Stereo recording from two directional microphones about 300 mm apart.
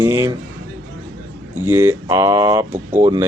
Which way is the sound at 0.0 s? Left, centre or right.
Centre.